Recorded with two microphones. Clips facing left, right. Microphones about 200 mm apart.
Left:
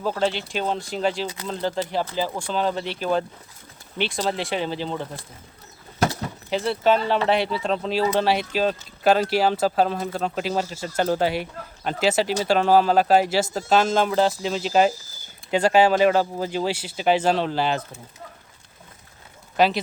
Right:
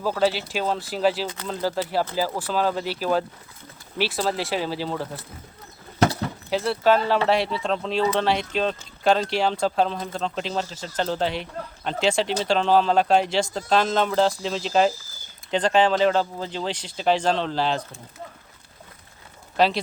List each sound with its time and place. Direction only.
0.0 s speech: 5° right (ahead or behind)
6.5 s speech: centre (ahead or behind)
19.5 s speech: centre (ahead or behind)